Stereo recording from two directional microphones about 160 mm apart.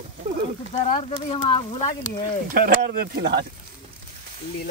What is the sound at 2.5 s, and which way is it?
Speech, 60° right (ahead or behind).